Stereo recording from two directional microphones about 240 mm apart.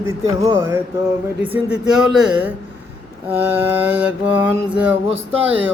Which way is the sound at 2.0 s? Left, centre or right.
Centre.